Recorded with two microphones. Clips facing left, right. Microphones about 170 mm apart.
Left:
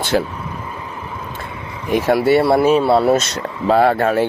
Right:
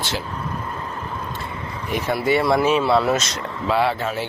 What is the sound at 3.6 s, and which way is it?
Speech, 45° left (ahead or behind).